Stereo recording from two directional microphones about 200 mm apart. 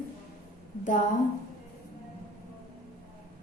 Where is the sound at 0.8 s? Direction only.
40° left (ahead or behind).